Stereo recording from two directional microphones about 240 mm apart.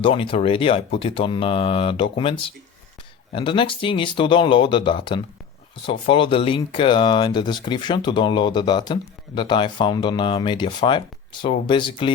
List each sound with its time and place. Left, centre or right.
0.0 s speech: left
3.3 s speech: left